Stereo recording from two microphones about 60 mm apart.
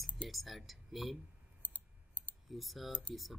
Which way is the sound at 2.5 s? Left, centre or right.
Centre.